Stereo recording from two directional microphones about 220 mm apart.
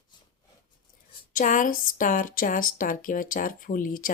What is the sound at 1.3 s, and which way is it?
Speech, 35° left (ahead or behind).